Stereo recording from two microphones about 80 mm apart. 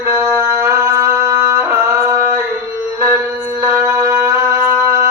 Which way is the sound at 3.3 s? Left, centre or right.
Right.